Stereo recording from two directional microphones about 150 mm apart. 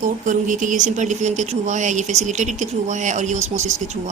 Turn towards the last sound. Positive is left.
turn(degrees=-50)  # may be behind; listen again after turning